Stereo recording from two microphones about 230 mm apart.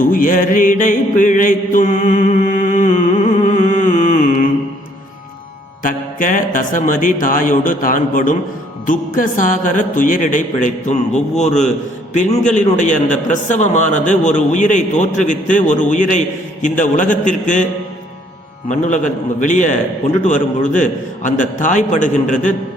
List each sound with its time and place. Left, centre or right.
0.0 s music: left
5.8 s speech: left
18.7 s speech: left